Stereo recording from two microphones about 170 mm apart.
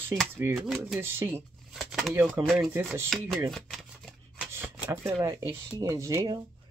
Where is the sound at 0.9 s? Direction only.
15° right (ahead or behind).